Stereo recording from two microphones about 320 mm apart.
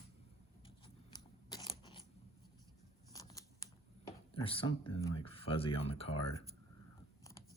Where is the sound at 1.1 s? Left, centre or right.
Centre.